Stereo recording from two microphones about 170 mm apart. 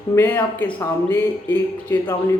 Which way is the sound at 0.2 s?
10° left (ahead or behind).